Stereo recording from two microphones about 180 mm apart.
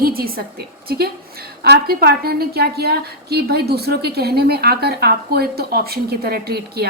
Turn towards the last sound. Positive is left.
turn(degrees=-60)  # may be behind; listen again after turning